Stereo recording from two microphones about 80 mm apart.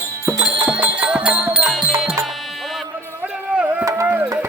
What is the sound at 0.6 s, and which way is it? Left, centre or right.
Music, centre.